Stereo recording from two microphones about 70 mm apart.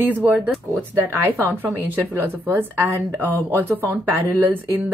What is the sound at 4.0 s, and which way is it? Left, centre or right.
Speech, right.